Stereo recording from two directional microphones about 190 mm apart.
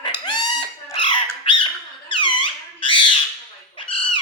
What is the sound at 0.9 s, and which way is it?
Squawk, 25° left (ahead or behind).